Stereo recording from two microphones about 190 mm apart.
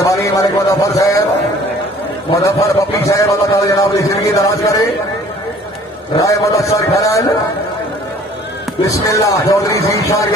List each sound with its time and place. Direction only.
0.0 s a man's voice: 15° left (ahead or behind)
2.4 s a man's voice: 15° left (ahead or behind)
6.1 s a man's voice: 15° left (ahead or behind)
8.9 s a man's voice: 15° left (ahead or behind)